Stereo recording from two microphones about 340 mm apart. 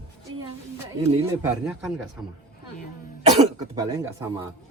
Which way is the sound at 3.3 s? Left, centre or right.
Centre.